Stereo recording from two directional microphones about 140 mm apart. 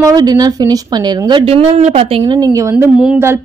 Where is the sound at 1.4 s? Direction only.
45° right (ahead or behind).